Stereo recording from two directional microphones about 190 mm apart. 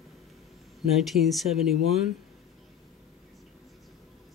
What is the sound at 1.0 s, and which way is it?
Speech, centre (ahead or behind).